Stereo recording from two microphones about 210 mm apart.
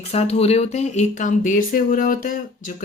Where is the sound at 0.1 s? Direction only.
30° left (ahead or behind).